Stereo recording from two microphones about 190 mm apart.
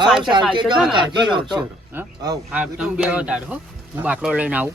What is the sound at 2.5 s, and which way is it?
A man's voice, 5° right (ahead or behind).